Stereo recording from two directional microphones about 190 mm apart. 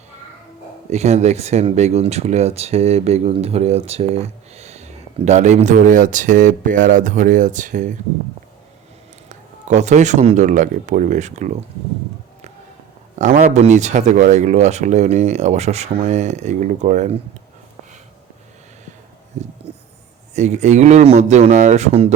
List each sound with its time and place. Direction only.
0.9 s speech: 35° right (ahead or behind)
9.3 s speech: 40° right (ahead or behind)
13.1 s speech: 40° right (ahead or behind)
19.3 s a sound: 35° right (ahead or behind)
20.3 s speech: 35° right (ahead or behind)